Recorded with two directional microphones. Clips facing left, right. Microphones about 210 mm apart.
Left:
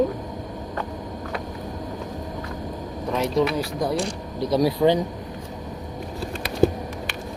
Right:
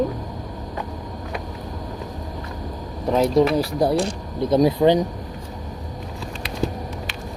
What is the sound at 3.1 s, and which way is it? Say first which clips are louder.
Speech: right 5 dB; 35° right (ahead or behind).